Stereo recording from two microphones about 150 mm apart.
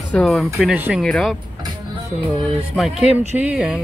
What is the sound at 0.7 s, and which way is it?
Speech, 10° right (ahead or behind).